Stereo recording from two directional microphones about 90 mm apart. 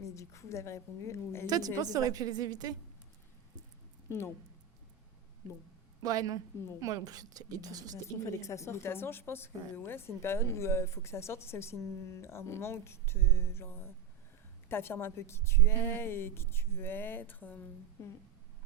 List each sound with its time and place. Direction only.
0.0 s a woman's voice: 35° left (ahead or behind)
1.5 s a woman's voice: 45° right (ahead or behind)
4.1 s a woman's voice: 30° left (ahead or behind)
6.0 s a woman's voice: 45° right (ahead or behind)
8.0 s a woman's voice: 35° left (ahead or behind)